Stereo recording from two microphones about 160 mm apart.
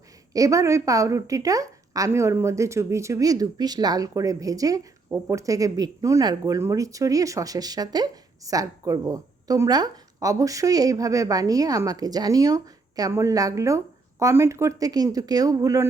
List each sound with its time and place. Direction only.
0.3 s speech: 20° right (ahead or behind)